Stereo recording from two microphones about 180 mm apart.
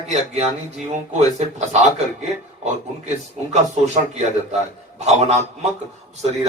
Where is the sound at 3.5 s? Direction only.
40° right (ahead or behind).